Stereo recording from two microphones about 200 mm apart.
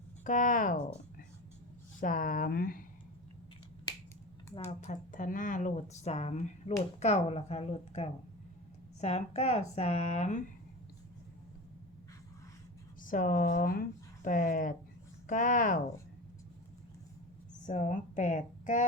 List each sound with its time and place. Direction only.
0.3 s speech: 40° left (ahead or behind)
2.0 s speech: 45° left (ahead or behind)
4.5 s speech: 35° left (ahead or behind)
13.1 s speech: 40° left (ahead or behind)
17.7 s speech: 35° left (ahead or behind)